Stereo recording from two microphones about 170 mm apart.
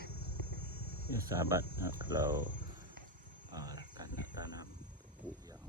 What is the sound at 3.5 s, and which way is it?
Cricket, 20° right (ahead or behind).